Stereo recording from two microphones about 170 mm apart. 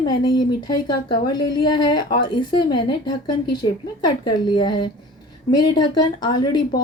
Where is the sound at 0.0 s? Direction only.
25° left (ahead or behind).